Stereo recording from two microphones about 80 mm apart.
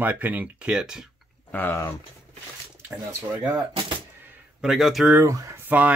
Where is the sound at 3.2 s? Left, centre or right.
Right.